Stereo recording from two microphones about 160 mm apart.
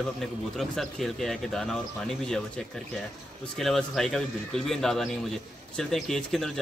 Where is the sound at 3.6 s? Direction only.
Centre (ahead or behind).